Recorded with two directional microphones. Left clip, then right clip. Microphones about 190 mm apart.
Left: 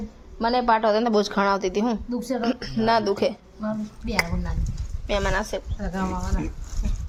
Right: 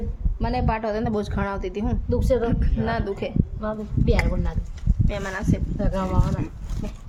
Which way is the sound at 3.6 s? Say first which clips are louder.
Even; 45° right (ahead or behind).